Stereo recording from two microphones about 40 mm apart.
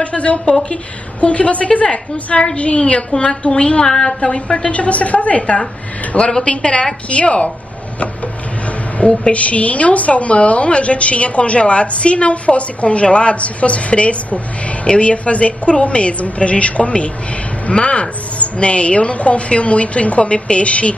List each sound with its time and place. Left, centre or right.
0.0 s a woman's voice: left
4.7 s a woman's voice: left
8.6 s a sound: left
9.3 s a woman's voice: left